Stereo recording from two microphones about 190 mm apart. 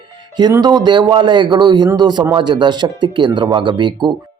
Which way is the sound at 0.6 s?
20° right (ahead or behind).